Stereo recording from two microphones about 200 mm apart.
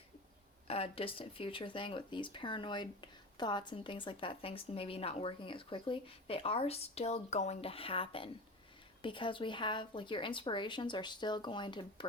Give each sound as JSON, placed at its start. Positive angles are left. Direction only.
{"t": 0.7, "sound": "speech", "side_deg": 30}